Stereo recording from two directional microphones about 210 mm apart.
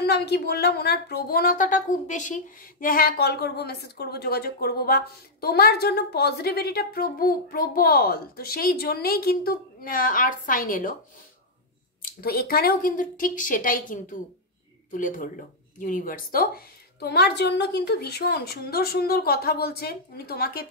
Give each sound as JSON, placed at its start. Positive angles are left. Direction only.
{"t": 0.0, "sound": "speech", "side_deg": 50}
{"t": 12.0, "sound": "speech", "side_deg": 45}